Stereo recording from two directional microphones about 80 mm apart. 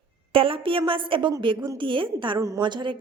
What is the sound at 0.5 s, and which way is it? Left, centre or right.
A woman's voice, right.